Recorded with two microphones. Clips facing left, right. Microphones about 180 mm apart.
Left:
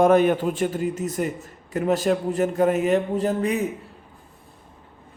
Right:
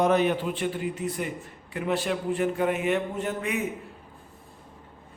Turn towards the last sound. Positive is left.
turn(degrees=35)  # may be behind; listen again after turning